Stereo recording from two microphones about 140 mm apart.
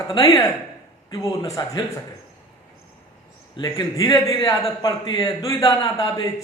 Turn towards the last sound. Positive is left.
turn(degrees=30)  # may be behind; listen again after turning